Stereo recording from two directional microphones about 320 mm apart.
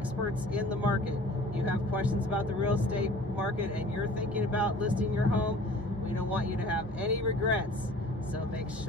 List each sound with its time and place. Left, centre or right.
0.6 s speech: centre
7.0 s speech: centre